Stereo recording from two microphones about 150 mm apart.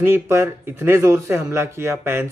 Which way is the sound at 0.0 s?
15° right (ahead or behind).